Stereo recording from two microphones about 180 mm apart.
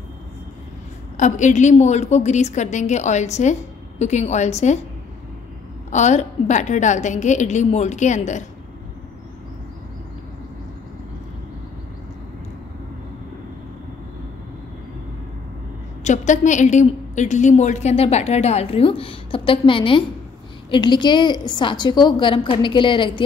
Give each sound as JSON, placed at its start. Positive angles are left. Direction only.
{"t": 1.1, "sound": "a woman's voice", "side_deg": 40}
{"t": 5.9, "sound": "a woman's voice", "side_deg": 40}
{"t": 16.0, "sound": "a woman's voice", "side_deg": 40}